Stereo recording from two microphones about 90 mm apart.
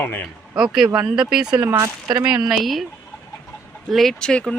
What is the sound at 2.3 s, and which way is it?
Speech, 5° right (ahead or behind).